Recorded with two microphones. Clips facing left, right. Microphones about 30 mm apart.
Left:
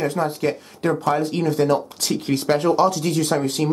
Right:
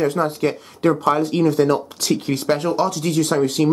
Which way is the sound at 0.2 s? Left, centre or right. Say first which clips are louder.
Right 2 dB; right.